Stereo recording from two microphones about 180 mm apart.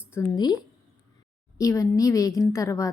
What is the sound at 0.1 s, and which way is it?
A woman's voice, 15° left (ahead or behind).